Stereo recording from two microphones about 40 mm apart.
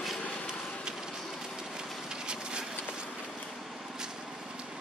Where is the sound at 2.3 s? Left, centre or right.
Right.